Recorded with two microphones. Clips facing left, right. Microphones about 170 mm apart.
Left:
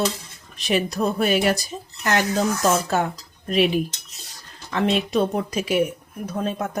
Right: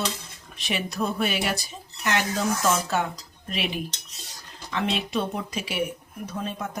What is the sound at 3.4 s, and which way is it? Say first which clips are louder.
A woman's voice: left 10 dB; 45° left (ahead or behind).